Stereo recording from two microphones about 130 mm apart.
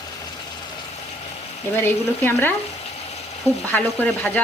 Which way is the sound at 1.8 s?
15° left (ahead or behind).